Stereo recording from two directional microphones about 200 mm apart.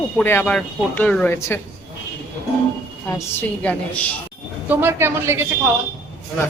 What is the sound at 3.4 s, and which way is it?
Speech, 5° left (ahead or behind).